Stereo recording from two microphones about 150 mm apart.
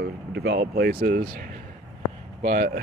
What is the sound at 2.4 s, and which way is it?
Speech, 70° right (ahead or behind).